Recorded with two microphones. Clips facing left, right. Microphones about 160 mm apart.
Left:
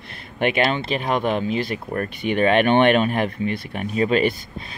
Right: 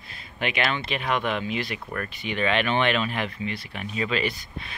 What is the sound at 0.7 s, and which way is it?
Speech, 40° left (ahead or behind).